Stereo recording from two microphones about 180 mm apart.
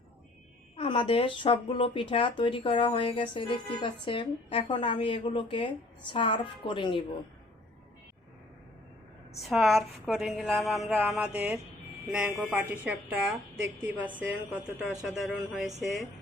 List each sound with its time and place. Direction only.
0.8 s speech: 30° left (ahead or behind)
9.3 s a woman's voice: centre (ahead or behind)